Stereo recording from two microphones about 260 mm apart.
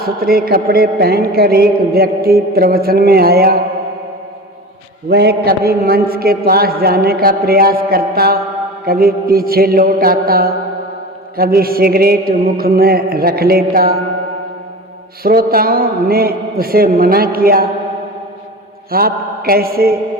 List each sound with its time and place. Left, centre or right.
0.0 s a man's voice: right
5.0 s a man's voice: right
15.2 s a man's voice: right
18.9 s a man's voice: right